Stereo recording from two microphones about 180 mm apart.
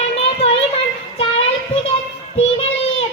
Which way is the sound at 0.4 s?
35° left (ahead or behind).